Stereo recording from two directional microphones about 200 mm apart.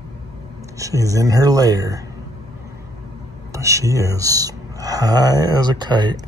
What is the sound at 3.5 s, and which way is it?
Speech, 15° right (ahead or behind).